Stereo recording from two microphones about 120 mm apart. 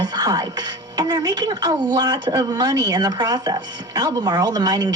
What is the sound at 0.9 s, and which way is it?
Speech, 35° right (ahead or behind).